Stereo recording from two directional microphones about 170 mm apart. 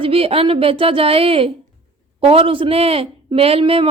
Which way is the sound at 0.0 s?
35° right (ahead or behind).